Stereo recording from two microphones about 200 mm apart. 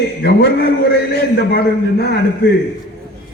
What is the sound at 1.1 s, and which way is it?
A man's voice, 50° left (ahead or behind).